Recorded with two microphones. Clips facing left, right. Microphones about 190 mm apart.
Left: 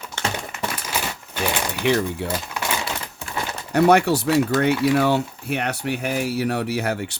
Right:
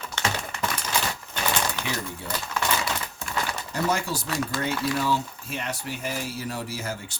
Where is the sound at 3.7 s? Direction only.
65° left (ahead or behind).